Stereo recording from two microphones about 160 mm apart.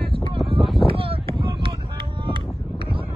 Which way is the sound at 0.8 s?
35° right (ahead or behind).